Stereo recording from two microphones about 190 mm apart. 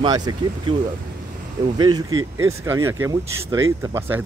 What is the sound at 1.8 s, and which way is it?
Speech, 20° right (ahead or behind).